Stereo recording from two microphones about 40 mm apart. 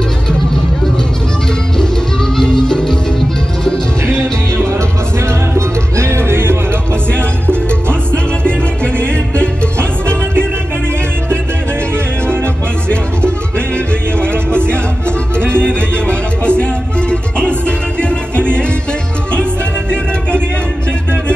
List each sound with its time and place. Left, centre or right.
2.3 s music: centre
6.0 s music: right
15.3 s music: right
16.1 s music: left